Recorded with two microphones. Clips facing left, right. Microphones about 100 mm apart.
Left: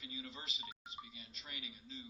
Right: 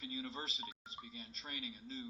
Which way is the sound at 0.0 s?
40° right (ahead or behind).